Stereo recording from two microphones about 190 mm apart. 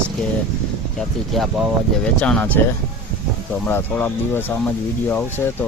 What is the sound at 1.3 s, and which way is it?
Speech, centre (ahead or behind).